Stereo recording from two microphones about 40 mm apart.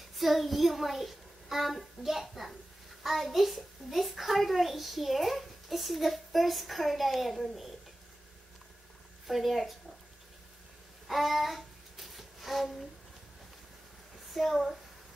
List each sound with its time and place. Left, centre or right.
0.1 s a child's voice: centre
9.3 s a child's voice: centre
11.1 s a sound: centre
14.3 s speech: centre